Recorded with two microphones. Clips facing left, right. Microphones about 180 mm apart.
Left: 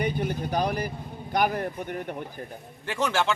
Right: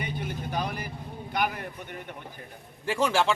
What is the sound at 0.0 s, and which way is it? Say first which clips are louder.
Vehicle: left 6 dB; 40° left (ahead or behind).